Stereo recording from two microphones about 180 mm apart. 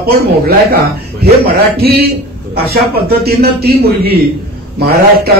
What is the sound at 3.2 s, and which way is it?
A man's voice, 60° right (ahead or behind).